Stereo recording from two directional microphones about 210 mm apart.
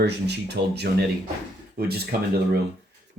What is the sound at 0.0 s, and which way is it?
Speech, 55° right (ahead or behind).